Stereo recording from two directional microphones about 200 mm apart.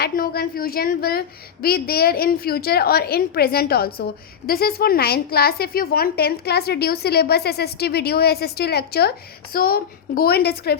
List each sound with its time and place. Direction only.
0.0 s a woman's voice: 50° left (ahead or behind)